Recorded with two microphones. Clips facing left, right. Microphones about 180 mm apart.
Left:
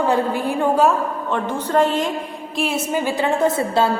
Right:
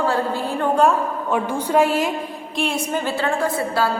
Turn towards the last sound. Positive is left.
turn(degrees=25)  # may be behind; listen again after turning